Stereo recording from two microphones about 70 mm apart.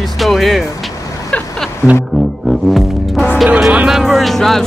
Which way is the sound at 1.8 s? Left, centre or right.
Left.